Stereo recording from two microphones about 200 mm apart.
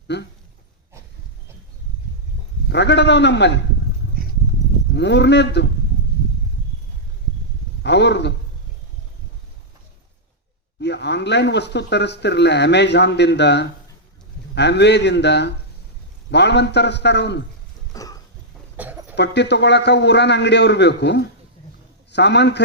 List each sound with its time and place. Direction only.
0.1 s speech: 60° left (ahead or behind)
2.6 s speech: 60° left (ahead or behind)
4.9 s speech: 60° left (ahead or behind)
7.8 s a man's voice: 60° left (ahead or behind)
10.8 s speech: 60° left (ahead or behind)
17.9 s a sound: 15° left (ahead or behind)
18.8 s a sound: 10° right (ahead or behind)
19.1 s speech: 60° left (ahead or behind)